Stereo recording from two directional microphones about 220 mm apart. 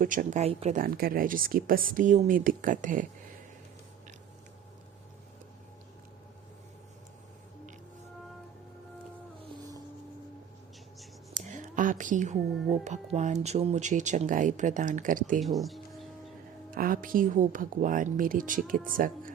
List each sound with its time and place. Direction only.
0.0 s speech: 40° right (ahead or behind)
0.8 s speech: 40° right (ahead or behind)
11.3 s a sound: 35° right (ahead or behind)
12.8 s speech: 30° right (ahead or behind)
15.4 s speech: centre (ahead or behind)
16.7 s speech: 40° right (ahead or behind)